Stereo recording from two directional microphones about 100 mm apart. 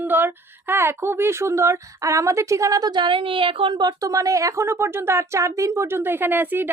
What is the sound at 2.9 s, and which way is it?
A woman's voice, 55° right (ahead or behind).